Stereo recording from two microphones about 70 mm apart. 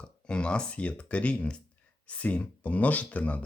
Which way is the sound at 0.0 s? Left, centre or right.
Centre.